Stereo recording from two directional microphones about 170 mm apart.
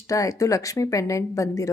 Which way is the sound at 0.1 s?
20° left (ahead or behind).